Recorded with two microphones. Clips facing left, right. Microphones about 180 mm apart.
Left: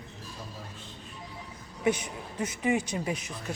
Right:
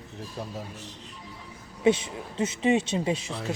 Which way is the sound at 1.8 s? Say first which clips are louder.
Right 5 dB; 25° right (ahead or behind).